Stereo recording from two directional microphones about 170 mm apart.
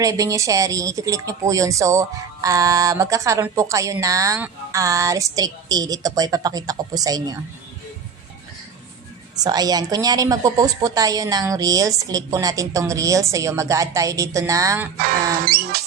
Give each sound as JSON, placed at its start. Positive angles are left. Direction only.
{"t": 0.0, "sound": "a woman's voice", "side_deg": -20}
{"t": 9.3, "sound": "a woman's voice", "side_deg": -25}
{"t": 15.0, "sound": "music", "side_deg": -60}